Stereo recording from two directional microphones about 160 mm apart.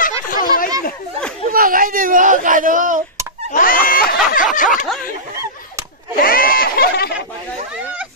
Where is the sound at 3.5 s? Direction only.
60° left (ahead or behind).